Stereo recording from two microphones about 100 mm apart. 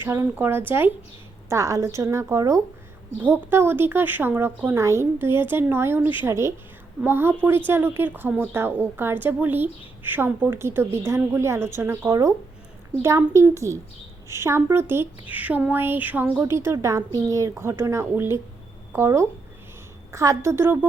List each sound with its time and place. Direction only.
0.0 s a woman's voice: 25° right (ahead or behind)